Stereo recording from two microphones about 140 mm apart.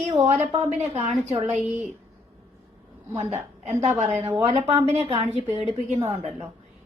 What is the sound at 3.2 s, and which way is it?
A woman's voice, 50° right (ahead or behind).